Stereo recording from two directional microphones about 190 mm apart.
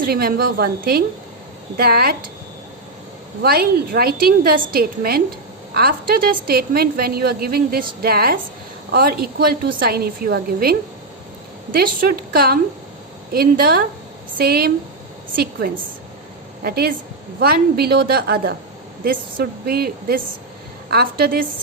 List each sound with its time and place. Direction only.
0.0 s a woman's voice: 50° right (ahead or behind)
3.4 s a woman's voice: 50° right (ahead or behind)
16.6 s a woman's voice: 55° right (ahead or behind)